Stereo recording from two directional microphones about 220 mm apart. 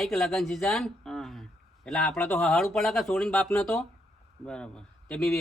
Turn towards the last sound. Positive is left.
turn(degrees=5)  # may be behind; listen again after turning